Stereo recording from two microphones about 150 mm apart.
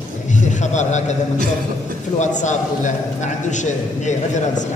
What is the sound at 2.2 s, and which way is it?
A man's voice, 55° left (ahead or behind).